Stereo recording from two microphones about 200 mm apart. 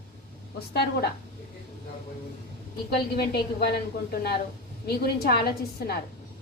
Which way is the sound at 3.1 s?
55° left (ahead or behind).